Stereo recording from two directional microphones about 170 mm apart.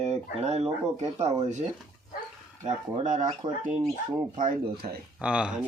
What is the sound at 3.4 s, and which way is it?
Speech, 40° right (ahead or behind).